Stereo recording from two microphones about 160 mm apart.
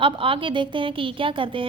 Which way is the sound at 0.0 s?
35° right (ahead or behind).